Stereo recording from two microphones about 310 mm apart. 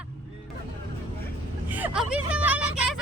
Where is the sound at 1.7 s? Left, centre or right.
Centre.